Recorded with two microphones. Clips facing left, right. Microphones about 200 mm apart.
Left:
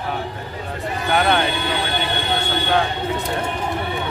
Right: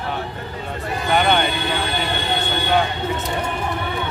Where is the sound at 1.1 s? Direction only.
Centre (ahead or behind).